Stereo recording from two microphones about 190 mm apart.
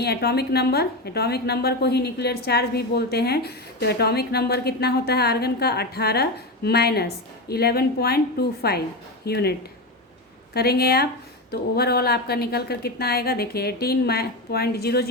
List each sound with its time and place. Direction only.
0.0 s a woman's voice: 60° left (ahead or behind)